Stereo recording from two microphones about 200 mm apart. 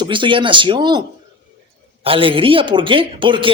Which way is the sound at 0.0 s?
25° right (ahead or behind).